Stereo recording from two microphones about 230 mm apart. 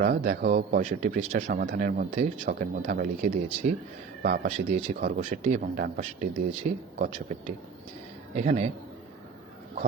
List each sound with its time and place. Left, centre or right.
0.0 s a man's voice: right